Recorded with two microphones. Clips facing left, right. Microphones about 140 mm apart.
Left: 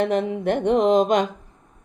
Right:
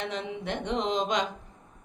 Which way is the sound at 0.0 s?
55° left (ahead or behind).